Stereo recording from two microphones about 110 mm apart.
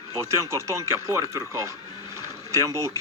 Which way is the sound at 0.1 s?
25° right (ahead or behind).